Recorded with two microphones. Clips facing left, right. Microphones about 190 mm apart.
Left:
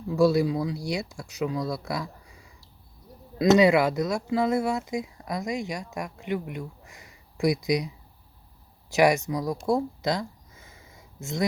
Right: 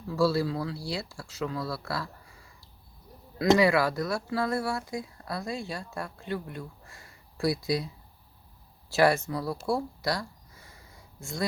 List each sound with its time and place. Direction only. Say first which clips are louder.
0.1 s speech: left 4 dB; 20° left (ahead or behind)
3.6 s speech: left 4 dB; 20° left (ahead or behind)